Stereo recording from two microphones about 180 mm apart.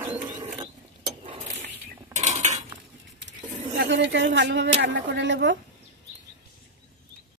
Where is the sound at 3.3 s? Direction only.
80° right.